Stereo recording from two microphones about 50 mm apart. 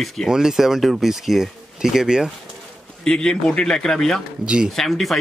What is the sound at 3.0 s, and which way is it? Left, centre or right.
Speech, centre.